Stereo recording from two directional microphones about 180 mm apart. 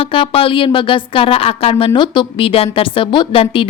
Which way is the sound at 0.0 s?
30° left (ahead or behind).